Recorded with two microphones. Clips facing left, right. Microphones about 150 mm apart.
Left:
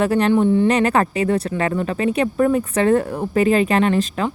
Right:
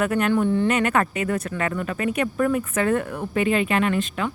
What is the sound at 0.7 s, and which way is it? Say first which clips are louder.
Speech: left 4 dB; 35° left (ahead or behind).